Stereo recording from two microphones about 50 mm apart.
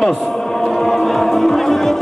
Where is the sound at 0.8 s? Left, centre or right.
Centre.